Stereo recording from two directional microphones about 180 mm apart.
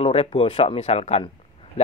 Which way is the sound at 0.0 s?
35° left (ahead or behind).